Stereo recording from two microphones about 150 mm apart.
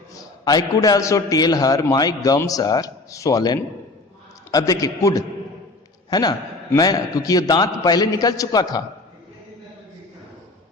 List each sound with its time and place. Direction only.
0.1 s a man's voice: 25° left (ahead or behind)